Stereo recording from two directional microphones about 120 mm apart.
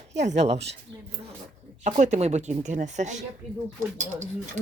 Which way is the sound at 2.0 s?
70° right (ahead or behind).